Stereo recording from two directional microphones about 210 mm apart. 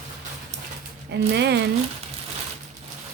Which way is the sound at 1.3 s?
55° right (ahead or behind).